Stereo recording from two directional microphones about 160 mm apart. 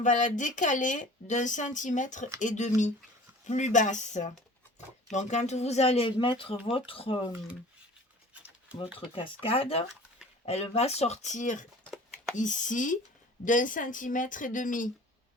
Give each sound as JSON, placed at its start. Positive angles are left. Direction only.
{"t": 0.0, "sound": "speech", "side_deg": 50}
{"t": 9.1, "sound": "speech", "side_deg": 35}